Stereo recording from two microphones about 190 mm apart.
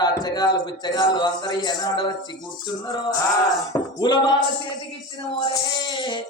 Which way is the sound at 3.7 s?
25° left (ahead or behind).